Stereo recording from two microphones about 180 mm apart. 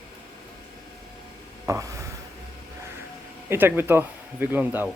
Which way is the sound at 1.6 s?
15° right (ahead or behind).